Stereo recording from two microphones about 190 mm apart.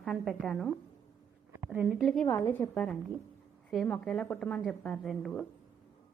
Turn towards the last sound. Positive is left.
turn(degrees=0)  # may be behind; listen again after turning